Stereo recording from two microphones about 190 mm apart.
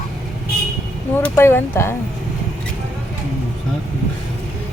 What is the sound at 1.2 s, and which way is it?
Speech, 10° left (ahead or behind).